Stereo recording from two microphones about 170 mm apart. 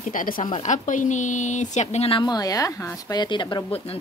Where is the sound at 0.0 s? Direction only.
50° left (ahead or behind).